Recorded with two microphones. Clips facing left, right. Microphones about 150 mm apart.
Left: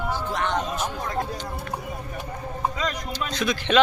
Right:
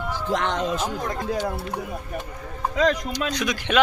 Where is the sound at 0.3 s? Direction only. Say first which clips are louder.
Right 4 dB; 90° right.